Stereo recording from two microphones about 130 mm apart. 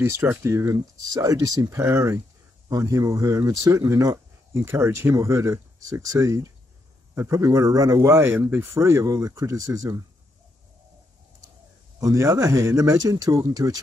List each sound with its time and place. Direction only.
0.0 s speech: 20° right (ahead or behind)
12.0 s speech: 25° right (ahead or behind)